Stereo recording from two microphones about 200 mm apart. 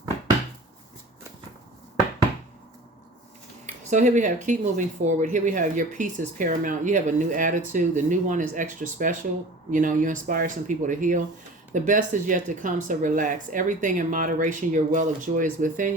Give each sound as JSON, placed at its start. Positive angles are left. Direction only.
{"t": 3.8, "sound": "speech", "side_deg": -40}